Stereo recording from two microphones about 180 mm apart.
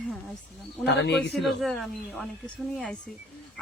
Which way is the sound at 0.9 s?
70° left (ahead or behind).